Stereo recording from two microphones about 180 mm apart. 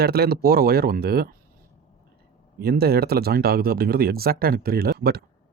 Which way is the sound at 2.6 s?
60° right (ahead or behind).